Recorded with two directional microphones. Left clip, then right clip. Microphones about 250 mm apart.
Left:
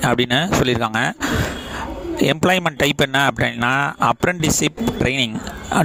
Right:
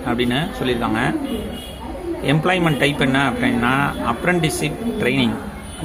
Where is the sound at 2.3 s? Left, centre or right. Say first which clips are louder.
Even; left.